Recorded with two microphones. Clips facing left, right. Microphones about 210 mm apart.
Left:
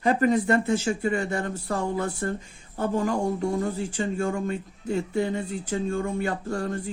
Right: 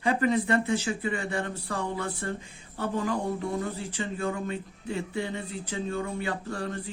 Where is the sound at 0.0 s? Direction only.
45° left (ahead or behind).